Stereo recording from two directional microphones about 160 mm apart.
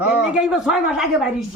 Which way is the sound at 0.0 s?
10° right (ahead or behind).